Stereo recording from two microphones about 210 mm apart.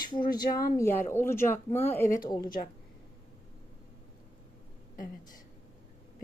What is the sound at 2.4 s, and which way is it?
Speech, 40° left (ahead or behind).